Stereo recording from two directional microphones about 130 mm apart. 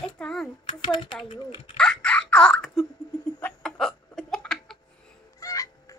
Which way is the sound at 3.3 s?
10° left (ahead or behind).